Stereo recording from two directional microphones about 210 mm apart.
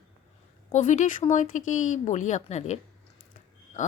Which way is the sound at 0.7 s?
35° left (ahead or behind).